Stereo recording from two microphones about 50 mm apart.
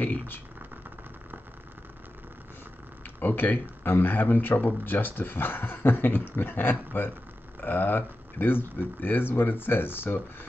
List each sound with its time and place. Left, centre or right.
0.0 s speech: left
3.2 s speech: left